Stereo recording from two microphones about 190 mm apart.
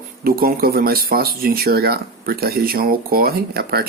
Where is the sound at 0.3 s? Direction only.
50° right (ahead or behind).